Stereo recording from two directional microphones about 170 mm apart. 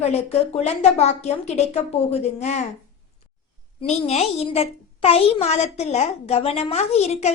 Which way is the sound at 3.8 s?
40° left (ahead or behind).